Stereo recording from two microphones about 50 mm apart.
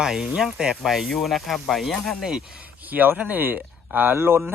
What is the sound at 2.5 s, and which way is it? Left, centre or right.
Speech, right.